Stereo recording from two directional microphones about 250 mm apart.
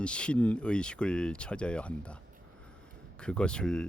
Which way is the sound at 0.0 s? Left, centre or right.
Centre.